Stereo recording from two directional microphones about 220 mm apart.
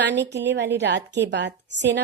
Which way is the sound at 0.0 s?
50° right (ahead or behind).